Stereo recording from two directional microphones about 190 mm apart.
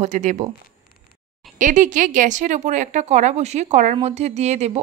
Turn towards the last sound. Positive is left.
turn(degrees=-35)  # may be behind; listen again after turning